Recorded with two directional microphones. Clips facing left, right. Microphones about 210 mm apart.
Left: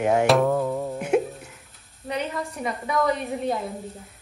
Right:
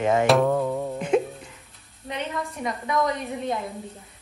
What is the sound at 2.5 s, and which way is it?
A woman's voice, 5° left (ahead or behind).